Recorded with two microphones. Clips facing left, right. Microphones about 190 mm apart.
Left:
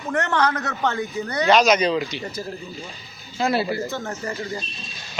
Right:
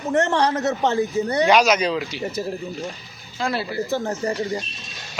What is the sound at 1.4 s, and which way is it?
Speech, 10° right (ahead or behind).